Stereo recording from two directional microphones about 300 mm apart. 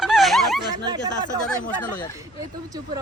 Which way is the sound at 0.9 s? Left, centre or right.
Centre.